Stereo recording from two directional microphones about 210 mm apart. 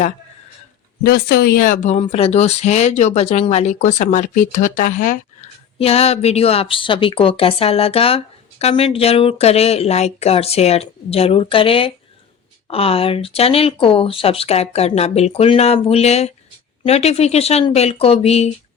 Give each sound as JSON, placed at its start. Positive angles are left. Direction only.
{"t": 1.0, "sound": "speech", "side_deg": 50}